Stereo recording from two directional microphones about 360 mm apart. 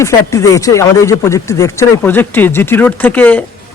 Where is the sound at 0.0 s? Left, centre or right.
Centre.